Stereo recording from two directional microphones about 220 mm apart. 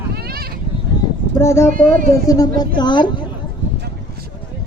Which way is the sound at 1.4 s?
10° left (ahead or behind).